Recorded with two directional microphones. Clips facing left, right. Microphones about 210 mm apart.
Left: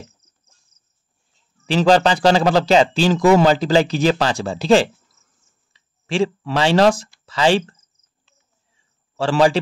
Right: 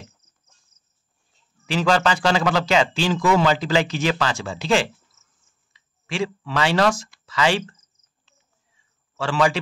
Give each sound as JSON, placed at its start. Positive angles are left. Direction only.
{"t": 1.7, "sound": "speech", "side_deg": 35}
{"t": 9.1, "sound": "a man's voice", "side_deg": 35}